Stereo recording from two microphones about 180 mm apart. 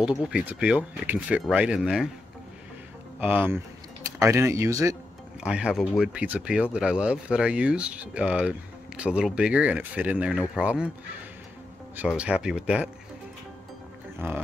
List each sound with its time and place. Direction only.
0.2 s speech: 5° right (ahead or behind)
3.2 s speech: 10° right (ahead or behind)
5.4 s speech: 5° right (ahead or behind)
12.2 s speech: 5° right (ahead or behind)